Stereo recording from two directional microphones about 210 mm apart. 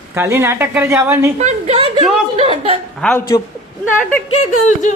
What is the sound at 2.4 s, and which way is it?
Chuckle, 25° right (ahead or behind).